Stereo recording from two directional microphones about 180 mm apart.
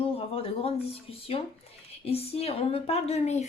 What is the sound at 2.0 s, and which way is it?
Speech, 35° left (ahead or behind).